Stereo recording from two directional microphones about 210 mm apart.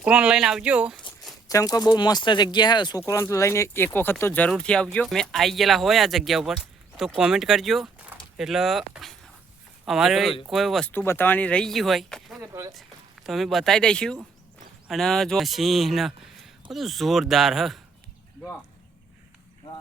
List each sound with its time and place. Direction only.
0.0 s speech: 5° right (ahead or behind)
1.5 s speech: 15° left (ahead or behind); by 8.1 s centre (ahead or behind)
8.4 s a sound: centre (ahead or behind)
9.8 s speech: centre (ahead or behind)
12.4 s speech: 15° right (ahead or behind)
13.2 s speech: centre (ahead or behind)